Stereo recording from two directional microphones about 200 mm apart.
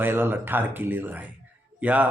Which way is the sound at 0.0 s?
10° right (ahead or behind).